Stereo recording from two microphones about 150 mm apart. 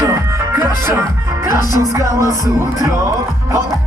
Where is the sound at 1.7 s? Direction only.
20° right (ahead or behind).